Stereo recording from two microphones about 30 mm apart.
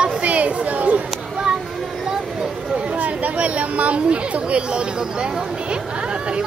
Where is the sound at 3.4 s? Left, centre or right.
Right.